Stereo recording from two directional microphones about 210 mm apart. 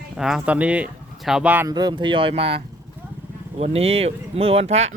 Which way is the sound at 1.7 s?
20° right (ahead or behind).